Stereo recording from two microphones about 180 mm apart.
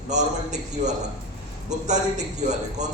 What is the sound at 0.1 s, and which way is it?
A man's voice, 40° right (ahead or behind).